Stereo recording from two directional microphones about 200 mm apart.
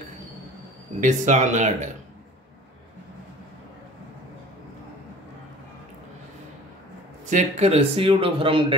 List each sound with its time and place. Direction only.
1.0 s speech: 40° right (ahead or behind)
7.2 s a man's voice: 35° right (ahead or behind)